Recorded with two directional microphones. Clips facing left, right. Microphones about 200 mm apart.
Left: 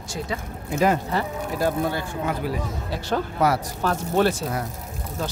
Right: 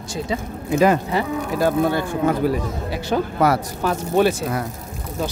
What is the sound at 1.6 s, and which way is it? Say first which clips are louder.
Speech: right 5 dB; 75° right (ahead or behind).